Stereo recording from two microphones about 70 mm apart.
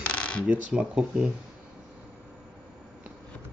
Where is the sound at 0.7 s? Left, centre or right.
Centre.